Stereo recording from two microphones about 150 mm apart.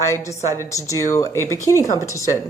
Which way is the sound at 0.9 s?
20° left (ahead or behind).